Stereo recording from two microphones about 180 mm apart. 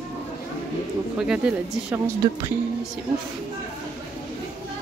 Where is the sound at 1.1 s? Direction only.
5° right (ahead or behind).